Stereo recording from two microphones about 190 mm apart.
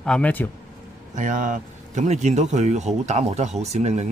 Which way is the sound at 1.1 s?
40° right (ahead or behind).